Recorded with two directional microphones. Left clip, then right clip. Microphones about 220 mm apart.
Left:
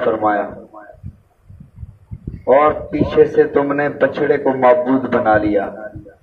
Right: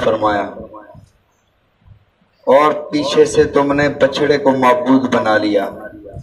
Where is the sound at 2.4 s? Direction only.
40° right (ahead or behind).